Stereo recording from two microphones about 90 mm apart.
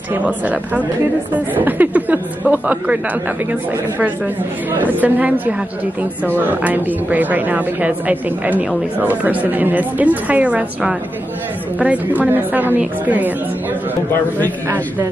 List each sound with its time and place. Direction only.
0.1 s a woman's voice: 15° right (ahead or behind)
4.7 s a woman's voice: 20° right (ahead or behind)